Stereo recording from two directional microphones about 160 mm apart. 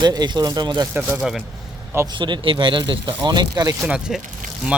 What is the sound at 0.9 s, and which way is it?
Speech, 10° right (ahead or behind).